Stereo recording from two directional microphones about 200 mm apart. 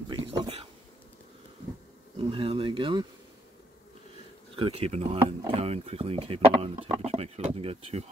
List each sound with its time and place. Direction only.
0.1 s a sound: 25° right (ahead or behind)
2.1 s speech: 25° right (ahead or behind)
4.6 s speech: 30° right (ahead or behind)